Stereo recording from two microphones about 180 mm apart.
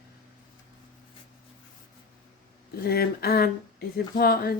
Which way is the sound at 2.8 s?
60° left (ahead or behind).